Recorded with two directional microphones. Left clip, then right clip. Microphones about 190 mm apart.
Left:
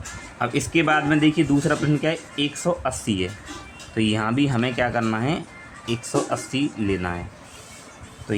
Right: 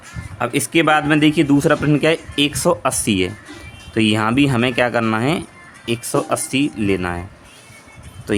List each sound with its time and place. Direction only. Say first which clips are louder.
0.3 s speech: right 4 dB; 35° right (ahead or behind)